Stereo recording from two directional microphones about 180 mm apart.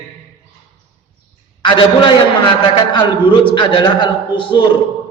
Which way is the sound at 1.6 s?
25° left (ahead or behind).